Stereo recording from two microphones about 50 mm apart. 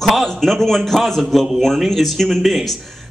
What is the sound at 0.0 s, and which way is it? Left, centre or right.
A man's voice, centre.